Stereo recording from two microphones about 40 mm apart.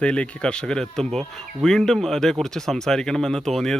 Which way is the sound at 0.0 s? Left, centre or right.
Left.